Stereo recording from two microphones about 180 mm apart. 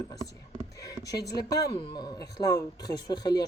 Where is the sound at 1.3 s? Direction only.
20° left (ahead or behind).